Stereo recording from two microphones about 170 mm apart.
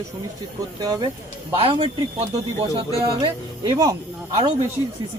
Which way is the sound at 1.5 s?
35° right (ahead or behind).